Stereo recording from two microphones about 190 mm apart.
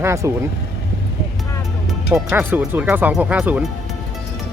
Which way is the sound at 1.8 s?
Centre (ahead or behind).